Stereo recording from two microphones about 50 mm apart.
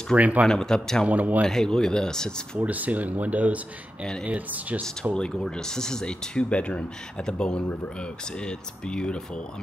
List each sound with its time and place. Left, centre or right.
0.1 s speech: right
0.5 s speech: centre
1.0 s speech: right
1.4 s speech: centre
2.6 s speech: right
5.1 s speech: centre